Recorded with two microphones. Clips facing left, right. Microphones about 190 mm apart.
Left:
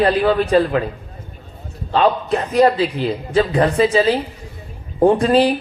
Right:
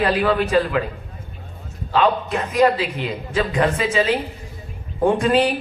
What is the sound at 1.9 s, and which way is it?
A man's voice, 35° left (ahead or behind).